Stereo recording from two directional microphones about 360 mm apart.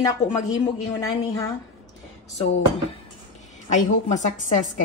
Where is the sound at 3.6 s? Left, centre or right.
Centre.